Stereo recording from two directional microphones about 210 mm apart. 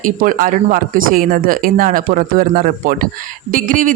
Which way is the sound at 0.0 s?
40° right (ahead or behind).